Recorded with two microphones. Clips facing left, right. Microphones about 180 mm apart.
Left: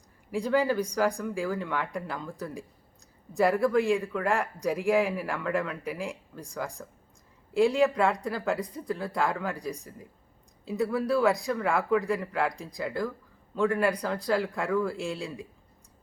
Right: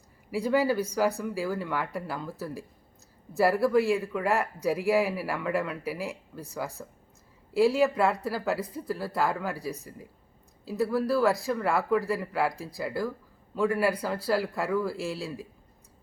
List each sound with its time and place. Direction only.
0.3 s a man's voice: 5° right (ahead or behind)